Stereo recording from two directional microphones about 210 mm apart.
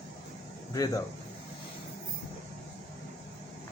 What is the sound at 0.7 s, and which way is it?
Speech, 15° left (ahead or behind).